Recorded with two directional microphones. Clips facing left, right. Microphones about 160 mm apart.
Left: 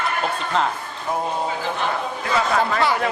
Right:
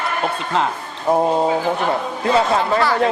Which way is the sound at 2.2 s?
30° right (ahead or behind).